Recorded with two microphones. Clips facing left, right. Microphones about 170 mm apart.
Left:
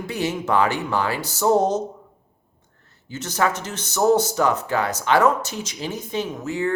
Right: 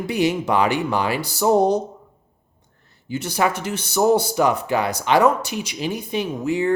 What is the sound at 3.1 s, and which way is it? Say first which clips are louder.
Speech: right 2 dB; 10° right (ahead or behind).